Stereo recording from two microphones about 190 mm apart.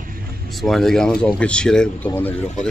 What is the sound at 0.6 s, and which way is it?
A man's voice, centre (ahead or behind).